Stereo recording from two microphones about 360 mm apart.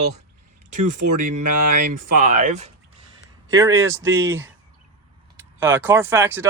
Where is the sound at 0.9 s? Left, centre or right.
Right.